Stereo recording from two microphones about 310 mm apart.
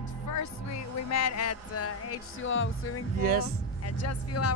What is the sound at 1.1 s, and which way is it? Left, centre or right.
Speech, left.